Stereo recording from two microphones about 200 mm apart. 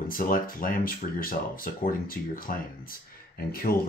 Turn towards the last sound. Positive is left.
turn(degrees=50)  # may be behind; listen again after turning